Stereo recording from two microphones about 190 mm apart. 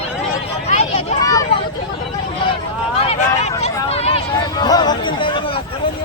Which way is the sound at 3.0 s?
35° left (ahead or behind).